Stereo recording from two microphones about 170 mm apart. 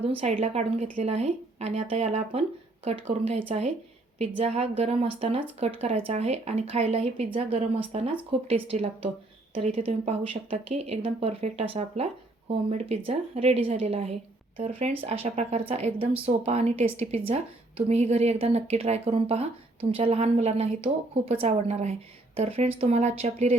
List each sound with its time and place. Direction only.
0.2 s a woman's voice: 40° right (ahead or behind)